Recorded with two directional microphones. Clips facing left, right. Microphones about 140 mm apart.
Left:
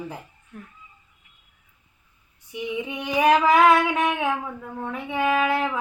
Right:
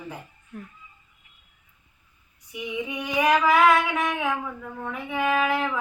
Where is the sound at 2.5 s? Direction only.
30° left (ahead or behind).